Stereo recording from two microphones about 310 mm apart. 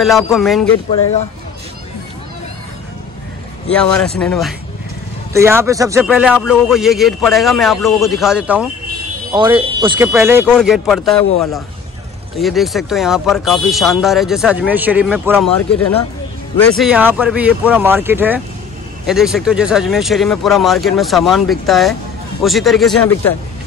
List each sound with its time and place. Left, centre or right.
0.0 s speech: centre
3.7 s speech: centre
9.3 s speech: centre
12.4 s speech: centre